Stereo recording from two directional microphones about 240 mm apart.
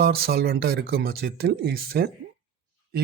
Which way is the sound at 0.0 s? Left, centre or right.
Right.